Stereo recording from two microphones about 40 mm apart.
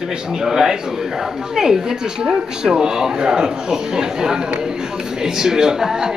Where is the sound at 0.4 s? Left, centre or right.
Centre.